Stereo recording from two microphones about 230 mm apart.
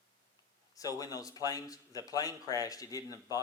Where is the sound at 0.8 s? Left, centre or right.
Centre.